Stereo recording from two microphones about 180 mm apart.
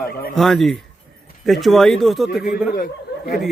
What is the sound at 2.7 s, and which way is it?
Speech, 50° left (ahead or behind).